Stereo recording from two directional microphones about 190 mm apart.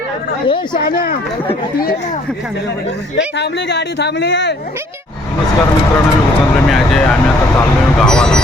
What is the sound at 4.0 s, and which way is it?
Speech, 65° left (ahead or behind).